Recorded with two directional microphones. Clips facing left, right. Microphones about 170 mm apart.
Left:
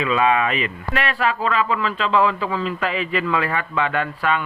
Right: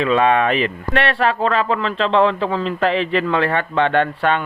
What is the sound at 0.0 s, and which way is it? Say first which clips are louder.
Speech: right 3 dB; 40° right (ahead or behind).